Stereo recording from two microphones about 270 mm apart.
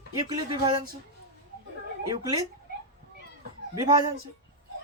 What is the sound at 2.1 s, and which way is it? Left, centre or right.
Speech, centre.